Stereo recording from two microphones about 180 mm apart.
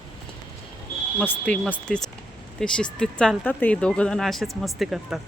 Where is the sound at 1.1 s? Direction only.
10° left (ahead or behind).